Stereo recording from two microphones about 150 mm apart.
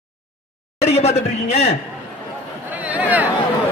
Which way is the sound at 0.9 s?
45° left (ahead or behind).